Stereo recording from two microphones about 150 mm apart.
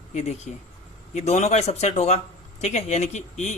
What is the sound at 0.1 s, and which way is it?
Speech, 45° left (ahead or behind).